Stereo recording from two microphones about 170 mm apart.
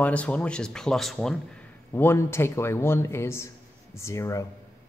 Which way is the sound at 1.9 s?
15° left (ahead or behind).